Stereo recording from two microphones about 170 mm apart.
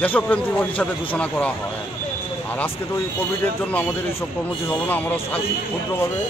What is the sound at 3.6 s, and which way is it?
A man's voice, 10° left (ahead or behind).